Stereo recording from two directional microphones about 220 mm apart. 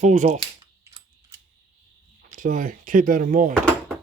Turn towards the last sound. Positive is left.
turn(degrees=5)  # may be behind; listen again after turning